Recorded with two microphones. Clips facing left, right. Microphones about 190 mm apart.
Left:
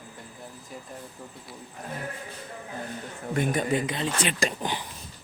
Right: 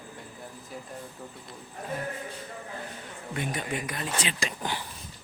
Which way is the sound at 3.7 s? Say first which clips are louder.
Left 6 dB; 25° left (ahead or behind).